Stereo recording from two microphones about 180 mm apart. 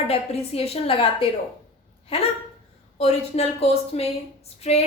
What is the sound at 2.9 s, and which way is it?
A woman's voice, 35° left (ahead or behind).